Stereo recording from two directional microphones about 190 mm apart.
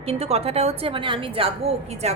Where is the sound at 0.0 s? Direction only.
30° right (ahead or behind).